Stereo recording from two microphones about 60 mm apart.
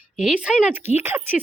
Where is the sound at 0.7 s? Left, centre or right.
Right.